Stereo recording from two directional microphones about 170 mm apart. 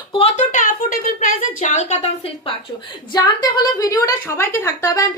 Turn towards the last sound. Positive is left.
turn(degrees=20)  # may be behind; listen again after turning